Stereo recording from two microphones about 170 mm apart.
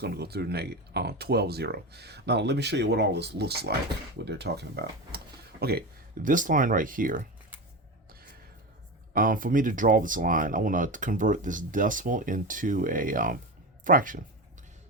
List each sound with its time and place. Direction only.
0.0 s speech: 70° right (ahead or behind)
6.2 s speech: 50° right (ahead or behind)
9.1 s speech: 55° right (ahead or behind)